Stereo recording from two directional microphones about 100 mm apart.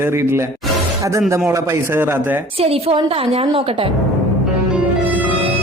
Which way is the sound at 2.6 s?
80° right.